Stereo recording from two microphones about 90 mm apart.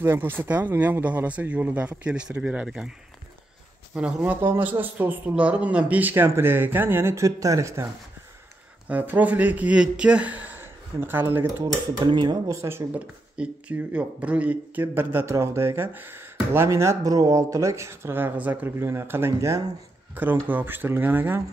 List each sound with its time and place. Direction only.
0.0 s speech: 25° right (ahead or behind); by 2.9 s 10° right (ahead or behind)
3.9 s speech: 15° right (ahead or behind); by 7.9 s 35° right (ahead or behind)
8.8 s speech: 20° right (ahead or behind)
11.4 s speech: 40° right (ahead or behind)
12.1 s speech: 55° right (ahead or behind)
12.4 s speech: 25° right (ahead or behind)
12.9 s speech: 15° right (ahead or behind)